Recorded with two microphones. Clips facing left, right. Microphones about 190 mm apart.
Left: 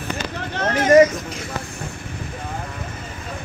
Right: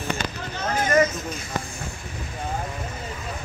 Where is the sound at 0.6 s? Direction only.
85° left.